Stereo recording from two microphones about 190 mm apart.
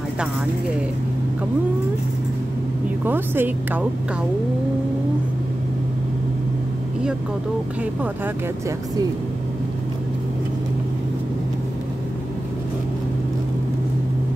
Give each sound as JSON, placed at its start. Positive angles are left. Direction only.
{"t": 3.1, "sound": "a woman's voice", "side_deg": -10}